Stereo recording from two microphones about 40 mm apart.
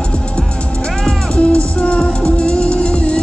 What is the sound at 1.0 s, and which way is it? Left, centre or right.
Music, left.